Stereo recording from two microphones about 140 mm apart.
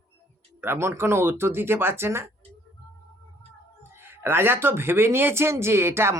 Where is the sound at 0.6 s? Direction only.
15° right (ahead or behind).